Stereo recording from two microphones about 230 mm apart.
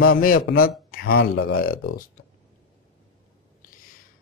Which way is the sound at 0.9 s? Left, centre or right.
Left.